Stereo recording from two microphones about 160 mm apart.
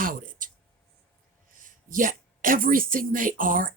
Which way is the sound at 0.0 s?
60° right (ahead or behind).